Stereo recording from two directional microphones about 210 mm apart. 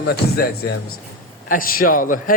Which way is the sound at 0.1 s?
50° left (ahead or behind).